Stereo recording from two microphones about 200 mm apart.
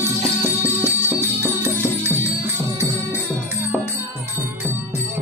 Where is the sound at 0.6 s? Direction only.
10° right (ahead or behind).